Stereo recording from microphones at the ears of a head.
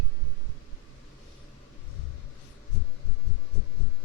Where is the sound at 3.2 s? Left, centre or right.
Left.